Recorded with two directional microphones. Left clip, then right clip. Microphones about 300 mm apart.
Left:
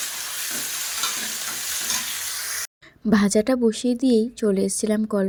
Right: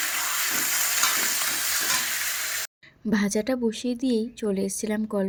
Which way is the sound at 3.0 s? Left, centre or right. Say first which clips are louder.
Left 6 dB; centre.